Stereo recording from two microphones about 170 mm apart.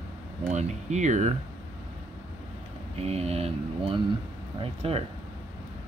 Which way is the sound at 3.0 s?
35° right (ahead or behind).